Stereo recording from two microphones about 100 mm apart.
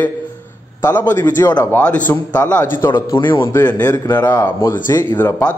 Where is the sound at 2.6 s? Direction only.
30° left (ahead or behind).